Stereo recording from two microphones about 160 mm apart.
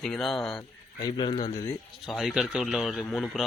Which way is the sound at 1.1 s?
30° left (ahead or behind).